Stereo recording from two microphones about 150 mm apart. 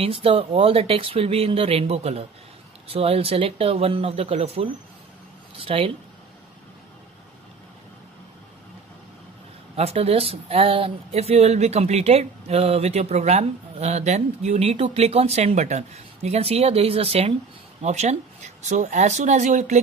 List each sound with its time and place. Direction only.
0.0 s speech: 40° right (ahead or behind)
9.8 s a woman's voice: 45° right (ahead or behind)